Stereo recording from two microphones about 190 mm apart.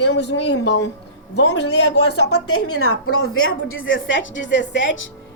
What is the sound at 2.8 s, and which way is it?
A woman's voice, 90° left.